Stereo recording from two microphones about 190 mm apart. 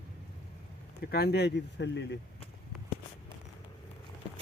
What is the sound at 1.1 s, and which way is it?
Speech, 55° left (ahead or behind).